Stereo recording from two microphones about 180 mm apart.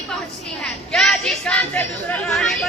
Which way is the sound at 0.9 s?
5° left (ahead or behind).